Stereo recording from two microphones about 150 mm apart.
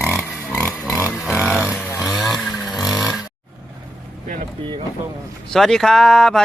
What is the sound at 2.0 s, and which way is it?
Vehicle, centre (ahead or behind).